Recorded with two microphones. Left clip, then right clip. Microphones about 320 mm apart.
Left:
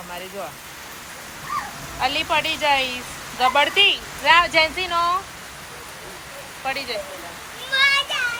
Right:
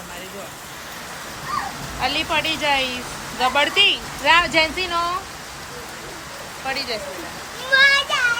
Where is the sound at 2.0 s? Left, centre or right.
Centre.